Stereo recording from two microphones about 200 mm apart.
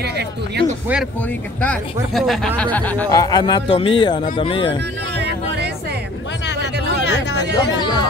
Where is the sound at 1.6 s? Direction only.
5° left (ahead or behind); by 4.7 s 25° left (ahead or behind).